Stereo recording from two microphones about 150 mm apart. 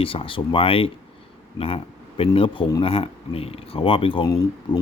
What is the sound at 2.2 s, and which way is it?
Speech, 35° left (ahead or behind).